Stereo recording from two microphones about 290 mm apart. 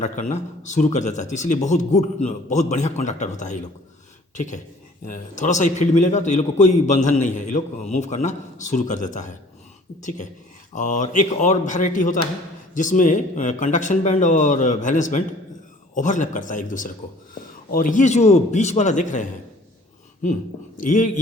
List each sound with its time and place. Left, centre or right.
0.0 s a man's voice: left
20.7 s a man's voice: left